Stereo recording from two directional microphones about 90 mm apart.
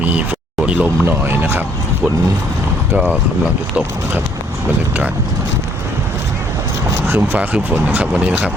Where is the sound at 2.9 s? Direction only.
15° right (ahead or behind).